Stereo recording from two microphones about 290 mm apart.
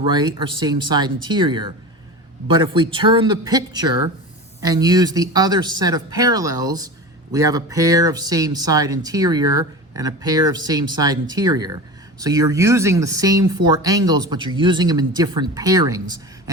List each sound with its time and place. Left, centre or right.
0.1 s speech: centre